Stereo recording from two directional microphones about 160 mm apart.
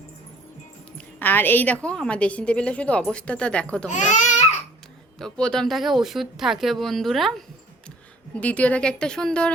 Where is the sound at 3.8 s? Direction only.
50° left (ahead or behind).